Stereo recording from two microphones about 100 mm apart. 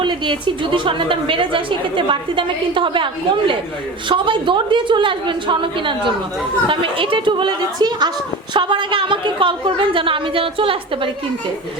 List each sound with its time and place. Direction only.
0.0 s a woman's voice: 55° right (ahead or behind)